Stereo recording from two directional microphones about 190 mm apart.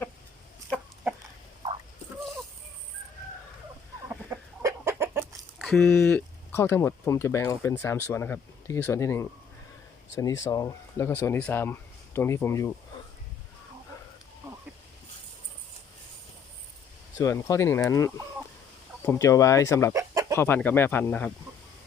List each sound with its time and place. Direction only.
4.1 s chicken: 15° right (ahead or behind)
5.5 s speech: 5° left (ahead or behind)
17.2 s speech: 15° left (ahead or behind)
19.9 s chicken: 15° right (ahead or behind)
20.3 s speech: 10° left (ahead or behind)